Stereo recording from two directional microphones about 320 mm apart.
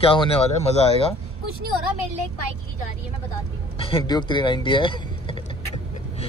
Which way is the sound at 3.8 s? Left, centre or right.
Centre.